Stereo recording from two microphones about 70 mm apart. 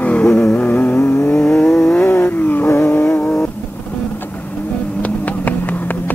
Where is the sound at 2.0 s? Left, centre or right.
Left.